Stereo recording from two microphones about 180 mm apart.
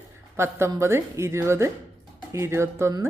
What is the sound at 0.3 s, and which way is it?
A woman's voice, 15° right (ahead or behind).